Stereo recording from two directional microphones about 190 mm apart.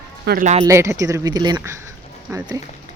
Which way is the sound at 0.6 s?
15° right (ahead or behind).